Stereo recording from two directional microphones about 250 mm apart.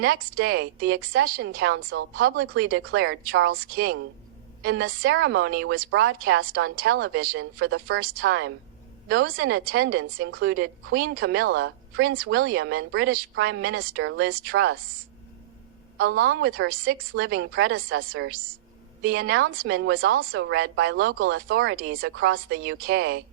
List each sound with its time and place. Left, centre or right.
1.1 s speech: right
1.5 s a woman's voice: right
3.5 s speech: right
4.7 s a woman's voice: right
14.4 s a woman's voice: right
16.0 s a woman's voice: right
16.6 s speech: right
17.2 s a woman's voice: right